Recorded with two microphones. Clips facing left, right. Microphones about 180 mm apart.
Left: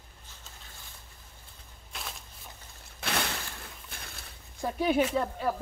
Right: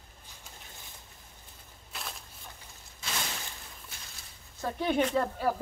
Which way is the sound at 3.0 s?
65° left (ahead or behind).